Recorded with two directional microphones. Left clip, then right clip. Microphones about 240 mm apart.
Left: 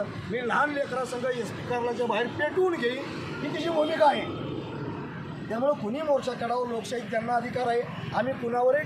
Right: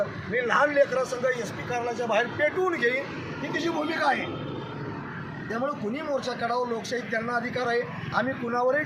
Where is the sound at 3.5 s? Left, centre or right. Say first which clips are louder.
Left 3 dB; right.